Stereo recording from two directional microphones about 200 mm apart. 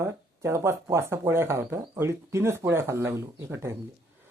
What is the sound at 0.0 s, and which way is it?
Speech, 15° right (ahead or behind).